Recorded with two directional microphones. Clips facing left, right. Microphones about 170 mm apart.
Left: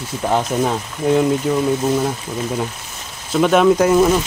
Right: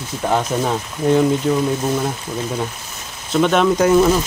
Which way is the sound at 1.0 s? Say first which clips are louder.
Right 1 dB; 5° left (ahead or behind).